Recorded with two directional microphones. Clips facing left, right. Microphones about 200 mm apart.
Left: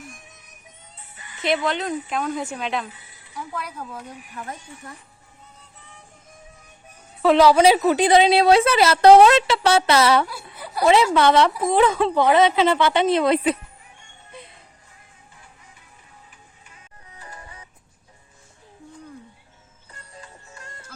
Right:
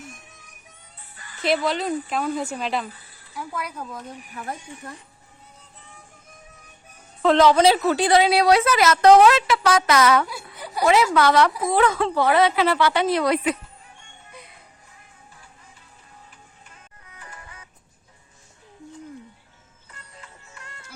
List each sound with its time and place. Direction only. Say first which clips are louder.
1.1 s music: right 1 dB; 20° left (ahead or behind)
1.4 s speech: even; centre (ahead or behind)
2.9 s a sound: even; 20° left (ahead or behind)
7.2 s a woman's voice: left 1 dB; 10° left (ahead or behind); by 13.6 s 25° left (ahead or behind)
17.1 s music: left 2 dB; 35° left (ahead or behind)
19.9 s music: left 3 dB; 35° left (ahead or behind)